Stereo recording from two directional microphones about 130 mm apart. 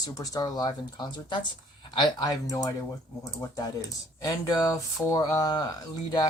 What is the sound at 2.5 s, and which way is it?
Speech, 30° left (ahead or behind).